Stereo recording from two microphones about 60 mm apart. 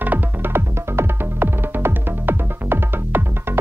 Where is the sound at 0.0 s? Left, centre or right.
Right.